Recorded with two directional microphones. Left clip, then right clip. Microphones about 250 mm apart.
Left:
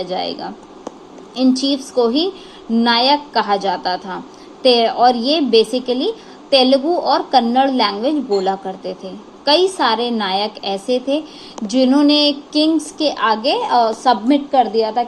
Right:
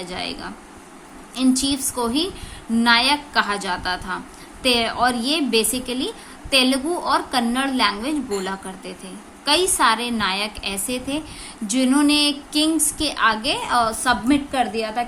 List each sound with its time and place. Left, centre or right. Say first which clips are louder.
0.0 s a woman's voice: left 7 dB; centre
1.6 s a woman's voice: left 7 dB; centre